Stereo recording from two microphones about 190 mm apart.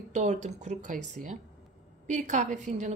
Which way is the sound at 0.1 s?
40° right (ahead or behind).